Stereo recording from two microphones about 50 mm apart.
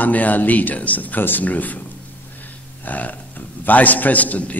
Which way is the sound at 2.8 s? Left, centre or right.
Left.